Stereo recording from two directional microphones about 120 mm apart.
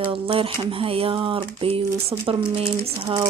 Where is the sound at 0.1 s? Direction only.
45° right (ahead or behind).